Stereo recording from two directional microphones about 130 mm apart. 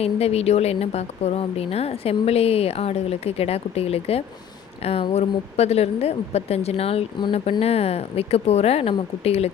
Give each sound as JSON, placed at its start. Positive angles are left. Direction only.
{"t": 0.0, "sound": "speech", "side_deg": 50}